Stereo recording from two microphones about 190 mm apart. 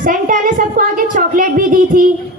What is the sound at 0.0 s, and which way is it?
A woman's voice, 45° right (ahead or behind).